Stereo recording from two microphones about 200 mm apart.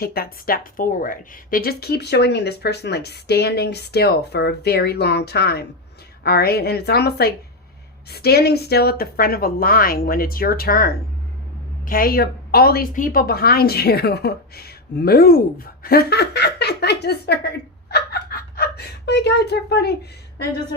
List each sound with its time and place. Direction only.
0.0 s a woman's voice: 50° left (ahead or behind)